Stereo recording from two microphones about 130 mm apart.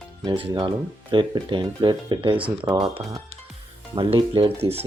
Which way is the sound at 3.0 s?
20° right (ahead or behind).